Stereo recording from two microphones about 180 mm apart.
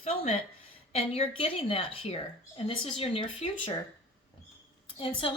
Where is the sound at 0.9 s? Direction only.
30° left (ahead or behind).